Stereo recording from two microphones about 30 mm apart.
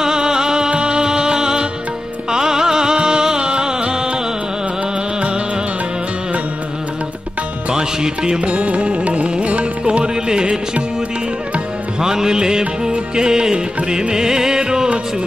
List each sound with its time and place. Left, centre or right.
0.0 s music: right
7.7 s music: right
8.4 s music: right
9.8 s music: right
12.0 s music: right